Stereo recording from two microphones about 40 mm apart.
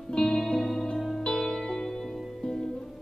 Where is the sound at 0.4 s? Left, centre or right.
Centre.